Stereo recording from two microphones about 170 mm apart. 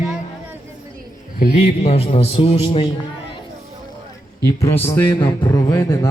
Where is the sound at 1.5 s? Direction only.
40° left (ahead or behind).